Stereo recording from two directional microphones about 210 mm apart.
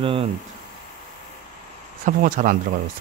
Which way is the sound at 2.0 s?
40° right (ahead or behind).